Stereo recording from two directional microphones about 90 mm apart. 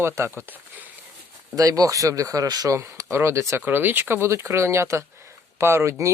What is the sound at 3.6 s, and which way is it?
Speech, 20° right (ahead or behind).